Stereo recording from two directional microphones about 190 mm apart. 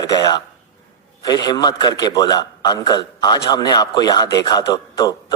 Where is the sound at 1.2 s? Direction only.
20° left (ahead or behind).